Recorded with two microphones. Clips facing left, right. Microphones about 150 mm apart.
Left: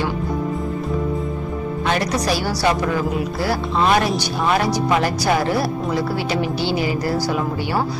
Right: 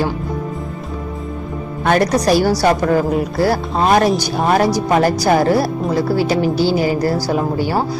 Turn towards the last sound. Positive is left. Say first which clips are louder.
# right 4 dB
turn(degrees=-40)  # may be behind; listen again after turning